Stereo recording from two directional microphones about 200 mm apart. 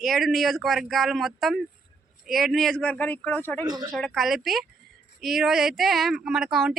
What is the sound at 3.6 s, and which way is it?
Speech, 20° right (ahead or behind).